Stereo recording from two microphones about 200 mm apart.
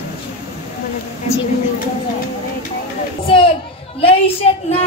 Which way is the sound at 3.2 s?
25° left (ahead or behind).